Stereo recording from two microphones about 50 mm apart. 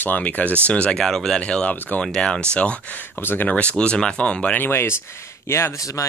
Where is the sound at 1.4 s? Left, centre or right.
Left.